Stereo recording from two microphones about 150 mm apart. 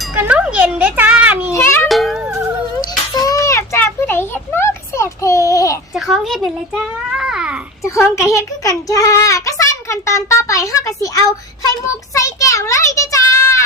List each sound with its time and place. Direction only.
0.2 s music: 10° right (ahead or behind)
1.5 s music: 15° left (ahead or behind)
1.9 s music: centre (ahead or behind)
3.2 s a sound: 20° left (ahead or behind)
5.9 s a child's voice: centre (ahead or behind)
7.9 s a child's voice: 20° left (ahead or behind)
12.1 s a sound: 20° left (ahead or behind)